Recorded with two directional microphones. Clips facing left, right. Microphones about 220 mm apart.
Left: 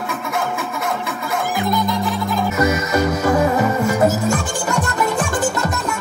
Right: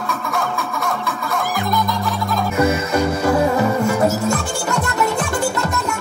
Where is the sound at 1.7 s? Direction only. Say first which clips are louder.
Left 2 dB; 20° left (ahead or behind).